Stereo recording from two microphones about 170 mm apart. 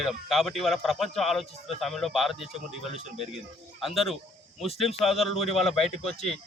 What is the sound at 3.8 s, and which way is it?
A man's voice, centre (ahead or behind).